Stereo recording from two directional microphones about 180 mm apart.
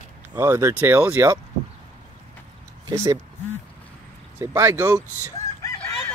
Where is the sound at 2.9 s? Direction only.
20° right (ahead or behind).